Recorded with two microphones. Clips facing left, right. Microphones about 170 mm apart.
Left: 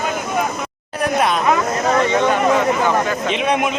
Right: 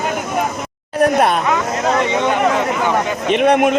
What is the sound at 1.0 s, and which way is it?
Speech, 55° right (ahead or behind).